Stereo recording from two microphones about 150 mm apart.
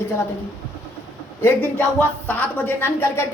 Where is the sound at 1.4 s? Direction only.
10° left (ahead or behind).